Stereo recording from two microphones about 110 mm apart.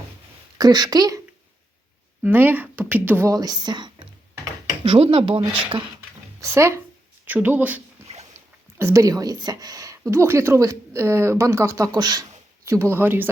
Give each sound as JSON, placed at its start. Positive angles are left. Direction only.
{"t": 0.6, "sound": "speech", "side_deg": -40}
{"t": 2.2, "sound": "speech", "side_deg": -20}
{"t": 3.3, "sound": "speech", "side_deg": -35}
{"t": 4.8, "sound": "speech", "side_deg": -55}
{"t": 6.4, "sound": "speech", "side_deg": -25}
{"t": 8.8, "sound": "speech", "side_deg": -30}
{"t": 11.9, "sound": "speech", "side_deg": -40}
{"t": 12.6, "sound": "speech", "side_deg": -25}